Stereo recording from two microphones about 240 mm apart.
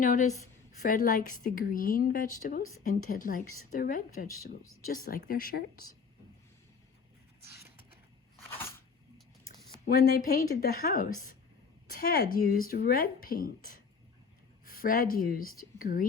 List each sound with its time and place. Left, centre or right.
0.0 s speech: left
8.4 s a sound: centre
9.8 s speech: left